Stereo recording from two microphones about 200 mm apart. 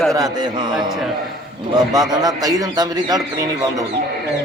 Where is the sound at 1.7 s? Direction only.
20° right (ahead or behind).